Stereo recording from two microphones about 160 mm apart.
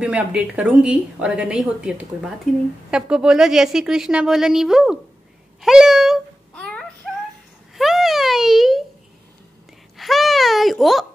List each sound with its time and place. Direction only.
0.0 s a woman's voice: 5° right (ahead or behind)
6.5 s a sound: 5° left (ahead or behind)
9.9 s babbling: centre (ahead or behind)